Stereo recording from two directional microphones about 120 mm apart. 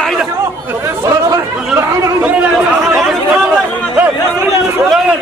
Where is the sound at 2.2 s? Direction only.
10° right (ahead or behind).